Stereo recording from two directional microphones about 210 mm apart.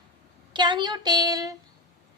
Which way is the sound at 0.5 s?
20° right (ahead or behind).